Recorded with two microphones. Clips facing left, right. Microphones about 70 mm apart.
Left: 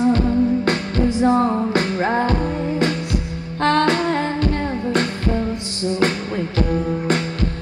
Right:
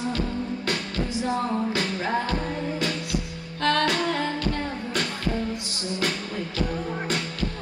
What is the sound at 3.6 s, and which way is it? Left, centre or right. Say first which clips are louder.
Music: left 6 dB; left.